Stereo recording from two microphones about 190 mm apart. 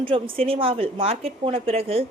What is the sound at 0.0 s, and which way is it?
Speech, 30° right (ahead or behind).